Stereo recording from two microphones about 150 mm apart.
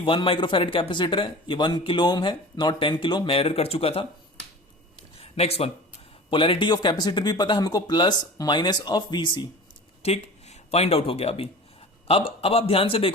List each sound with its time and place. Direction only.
0.0 s speech: 35° left (ahead or behind)
5.2 s speech: 40° left (ahead or behind)
10.0 s speech: 45° left (ahead or behind)